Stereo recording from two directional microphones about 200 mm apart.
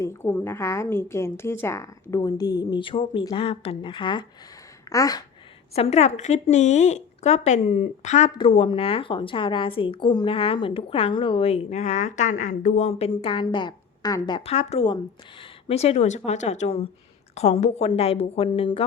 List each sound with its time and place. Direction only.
0.0 s a woman's voice: 10° left (ahead or behind)
5.7 s a woman's voice: 30° left (ahead or behind)